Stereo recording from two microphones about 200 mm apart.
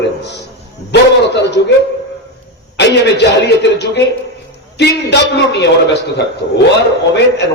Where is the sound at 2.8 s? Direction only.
60° left (ahead or behind).